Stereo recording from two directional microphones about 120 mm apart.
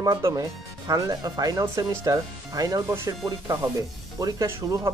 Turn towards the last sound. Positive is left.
turn(degrees=-30)  # may be behind; listen again after turning